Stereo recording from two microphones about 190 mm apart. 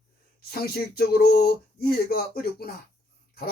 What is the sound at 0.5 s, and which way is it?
Speech, 55° left (ahead or behind).